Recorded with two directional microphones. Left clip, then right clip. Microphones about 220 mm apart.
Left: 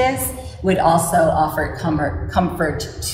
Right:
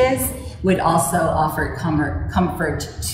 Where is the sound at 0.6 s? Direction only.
30° left (ahead or behind).